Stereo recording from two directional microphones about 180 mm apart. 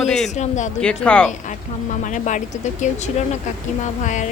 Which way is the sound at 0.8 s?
5° left (ahead or behind).